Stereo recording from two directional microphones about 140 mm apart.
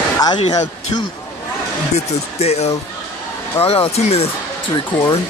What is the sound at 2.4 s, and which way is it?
Speech, 50° left (ahead or behind).